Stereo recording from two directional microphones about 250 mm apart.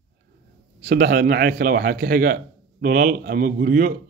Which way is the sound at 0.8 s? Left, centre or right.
Right.